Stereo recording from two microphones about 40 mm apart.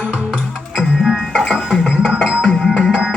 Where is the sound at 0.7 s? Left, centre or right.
Centre.